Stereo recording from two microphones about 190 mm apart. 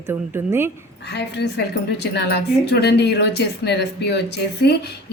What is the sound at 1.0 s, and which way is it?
Speech, 60° left (ahead or behind).